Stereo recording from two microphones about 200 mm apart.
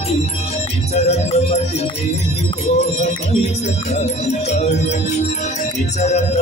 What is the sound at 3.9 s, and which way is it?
Music, 35° left (ahead or behind).